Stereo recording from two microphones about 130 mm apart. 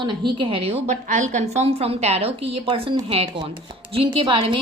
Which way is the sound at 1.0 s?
70° right (ahead or behind).